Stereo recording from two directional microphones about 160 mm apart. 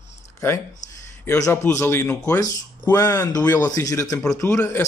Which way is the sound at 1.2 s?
15° left (ahead or behind).